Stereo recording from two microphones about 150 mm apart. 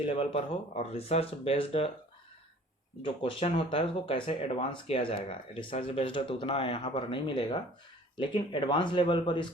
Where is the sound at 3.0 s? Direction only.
35° left (ahead or behind).